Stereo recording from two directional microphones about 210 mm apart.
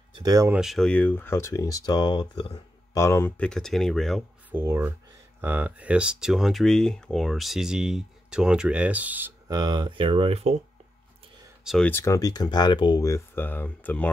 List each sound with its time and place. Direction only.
0.2 s speech: 15° right (ahead or behind)
0.6 s speech: centre (ahead or behind); by 2.6 s 25° left (ahead or behind)
2.9 s speech: 15° left (ahead or behind)
4.6 s speech: 10° right (ahead or behind); by 10.6 s 30° right (ahead or behind)
11.6 s speech: 5° left (ahead or behind)